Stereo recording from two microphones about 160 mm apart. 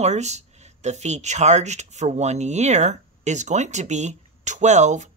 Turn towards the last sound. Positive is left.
turn(degrees=-45)  # may be behind; listen again after turning